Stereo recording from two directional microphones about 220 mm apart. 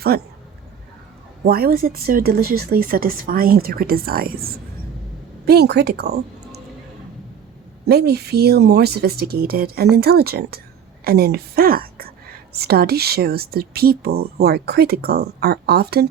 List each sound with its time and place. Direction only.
0.1 s speech: 45° right (ahead or behind)
1.5 s speech: 45° right (ahead or behind)
7.9 s a woman's voice: 45° right (ahead or behind)